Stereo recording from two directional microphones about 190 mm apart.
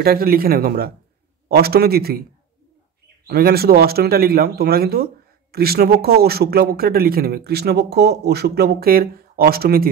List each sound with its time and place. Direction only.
0.0 s a man's voice: 50° right (ahead or behind)
3.3 s speech: 55° right (ahead or behind)